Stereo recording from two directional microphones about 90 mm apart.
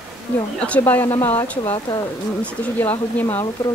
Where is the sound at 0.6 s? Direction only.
15° left (ahead or behind).